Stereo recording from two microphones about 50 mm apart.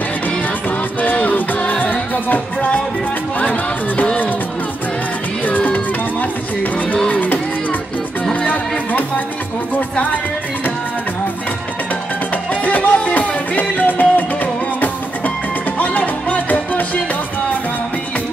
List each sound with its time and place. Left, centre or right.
1.1 s music: left
5.4 s music: left
7.1 s music: left
12.6 s music: left